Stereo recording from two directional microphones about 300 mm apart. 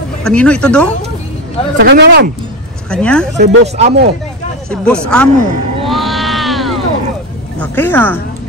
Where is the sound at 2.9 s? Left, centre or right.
Centre.